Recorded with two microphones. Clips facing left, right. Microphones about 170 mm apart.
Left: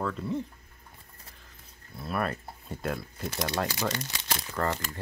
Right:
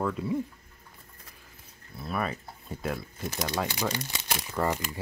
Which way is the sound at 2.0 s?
Centre (ahead or behind).